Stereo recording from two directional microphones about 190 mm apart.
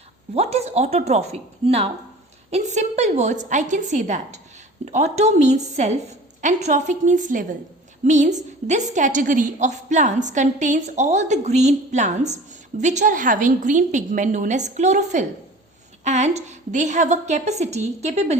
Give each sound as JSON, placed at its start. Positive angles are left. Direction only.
{"t": 0.3, "sound": "a woman's voice", "side_deg": -35}